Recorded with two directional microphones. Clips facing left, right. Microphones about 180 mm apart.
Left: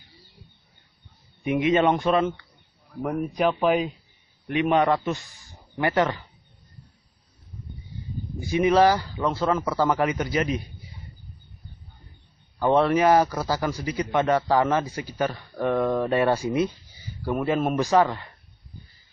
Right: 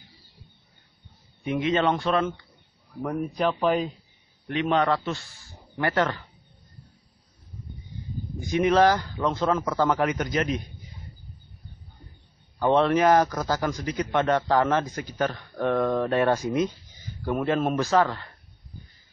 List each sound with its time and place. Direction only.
1.4 s speech: 15° left (ahead or behind)
8.4 s speech: 10° left (ahead or behind)
12.6 s speech: 5° left (ahead or behind)